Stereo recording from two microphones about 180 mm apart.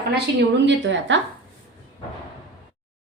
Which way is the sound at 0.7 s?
90° right.